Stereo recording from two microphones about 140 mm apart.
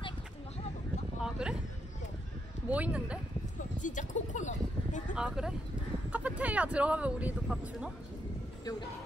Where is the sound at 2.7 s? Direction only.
10° right (ahead or behind).